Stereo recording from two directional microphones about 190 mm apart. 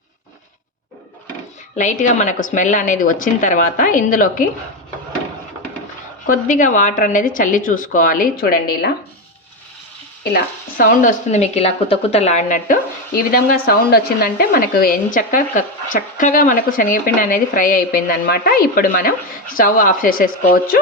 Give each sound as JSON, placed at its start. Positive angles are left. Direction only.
{"t": 1.7, "sound": "speech", "side_deg": 40}
{"t": 6.2, "sound": "speech", "side_deg": 45}
{"t": 10.8, "sound": "speech", "side_deg": 40}